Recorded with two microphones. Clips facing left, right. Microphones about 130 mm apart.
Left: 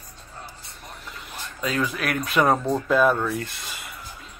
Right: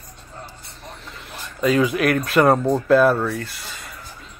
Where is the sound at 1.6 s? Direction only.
10° right (ahead or behind).